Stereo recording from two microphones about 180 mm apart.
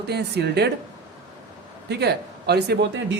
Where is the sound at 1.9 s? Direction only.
65° right (ahead or behind).